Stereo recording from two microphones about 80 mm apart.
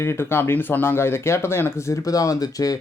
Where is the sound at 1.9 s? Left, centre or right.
Left.